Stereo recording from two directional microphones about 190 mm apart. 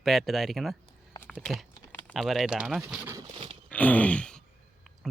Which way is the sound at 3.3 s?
30° right (ahead or behind).